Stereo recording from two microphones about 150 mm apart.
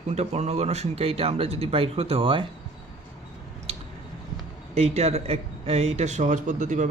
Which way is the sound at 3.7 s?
40° right (ahead or behind).